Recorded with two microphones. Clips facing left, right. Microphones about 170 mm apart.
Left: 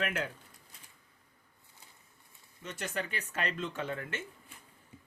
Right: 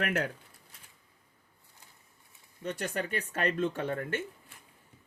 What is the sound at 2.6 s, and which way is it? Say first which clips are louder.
Speech: right 4 dB; 50° right (ahead or behind).